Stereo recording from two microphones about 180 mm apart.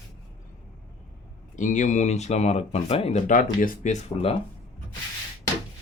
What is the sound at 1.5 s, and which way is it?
Speech, 45° left (ahead or behind).